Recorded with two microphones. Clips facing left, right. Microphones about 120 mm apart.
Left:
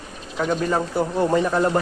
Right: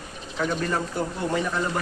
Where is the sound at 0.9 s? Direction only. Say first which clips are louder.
Left 7 dB; 40° left (ahead or behind).